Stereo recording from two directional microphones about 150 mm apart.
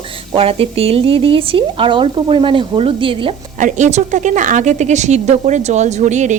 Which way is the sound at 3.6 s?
55° right (ahead or behind).